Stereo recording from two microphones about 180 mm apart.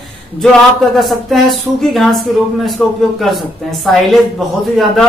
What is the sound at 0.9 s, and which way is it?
Speech, centre (ahead or behind).